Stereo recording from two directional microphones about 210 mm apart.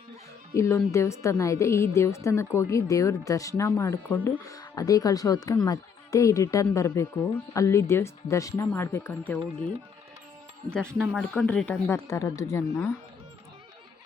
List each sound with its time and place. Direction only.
0.5 s a woman's voice: 15° left (ahead or behind)
10.7 s a woman's voice: 5° left (ahead or behind)